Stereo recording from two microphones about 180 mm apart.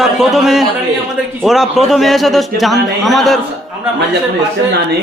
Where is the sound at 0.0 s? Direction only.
Centre (ahead or behind).